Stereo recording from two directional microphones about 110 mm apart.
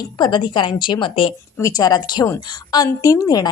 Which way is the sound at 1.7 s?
35° left (ahead or behind).